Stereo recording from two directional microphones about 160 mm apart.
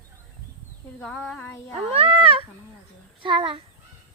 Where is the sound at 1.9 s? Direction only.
35° right (ahead or behind).